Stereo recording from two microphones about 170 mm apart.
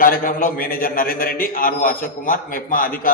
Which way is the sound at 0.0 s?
55° left (ahead or behind).